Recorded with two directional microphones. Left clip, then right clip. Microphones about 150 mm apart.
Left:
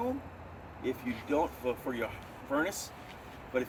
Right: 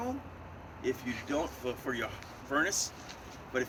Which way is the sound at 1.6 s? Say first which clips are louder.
Left 1 dB; centre (ahead or behind).